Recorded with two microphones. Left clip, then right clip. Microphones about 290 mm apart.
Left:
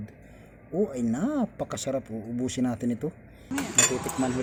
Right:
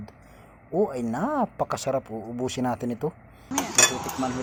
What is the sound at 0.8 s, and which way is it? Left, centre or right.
Speech, centre.